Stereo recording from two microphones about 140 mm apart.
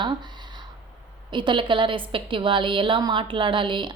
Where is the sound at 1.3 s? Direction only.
35° right (ahead or behind).